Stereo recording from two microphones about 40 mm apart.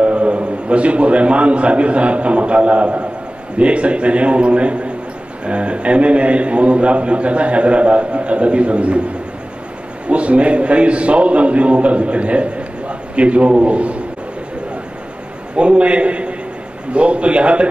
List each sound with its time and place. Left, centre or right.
0.0 s a man's voice: right
10.0 s a man's voice: right
15.5 s a man's voice: right